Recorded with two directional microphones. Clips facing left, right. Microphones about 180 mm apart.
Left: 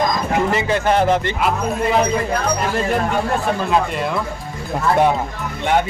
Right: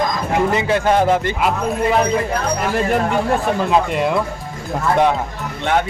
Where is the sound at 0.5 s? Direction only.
10° right (ahead or behind).